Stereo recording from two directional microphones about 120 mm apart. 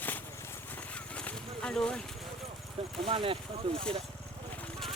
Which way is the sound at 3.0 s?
50° right (ahead or behind).